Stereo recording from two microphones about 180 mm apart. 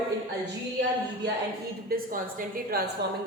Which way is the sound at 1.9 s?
50° right (ahead or behind).